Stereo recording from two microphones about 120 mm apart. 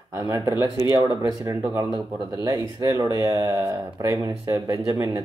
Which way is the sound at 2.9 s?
35° right (ahead or behind).